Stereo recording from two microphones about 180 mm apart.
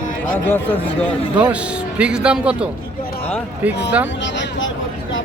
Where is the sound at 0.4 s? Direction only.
10° left (ahead or behind).